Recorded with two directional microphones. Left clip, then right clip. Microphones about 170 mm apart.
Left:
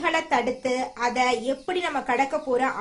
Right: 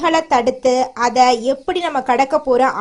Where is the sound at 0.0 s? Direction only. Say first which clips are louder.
Right 9 dB; 40° right (ahead or behind).